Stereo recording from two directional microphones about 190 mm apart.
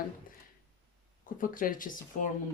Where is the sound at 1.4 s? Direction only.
45° left (ahead or behind).